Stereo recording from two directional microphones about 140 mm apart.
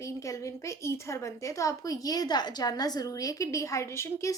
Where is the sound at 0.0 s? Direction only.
20° left (ahead or behind).